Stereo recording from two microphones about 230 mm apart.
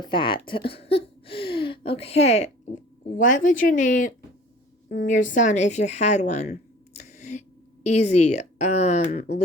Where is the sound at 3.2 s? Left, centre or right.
Left.